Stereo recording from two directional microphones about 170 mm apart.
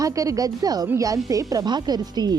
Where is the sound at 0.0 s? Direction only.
20° right (ahead or behind).